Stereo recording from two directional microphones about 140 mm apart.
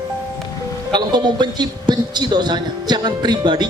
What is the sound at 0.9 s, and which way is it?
A man's voice, 30° right (ahead or behind).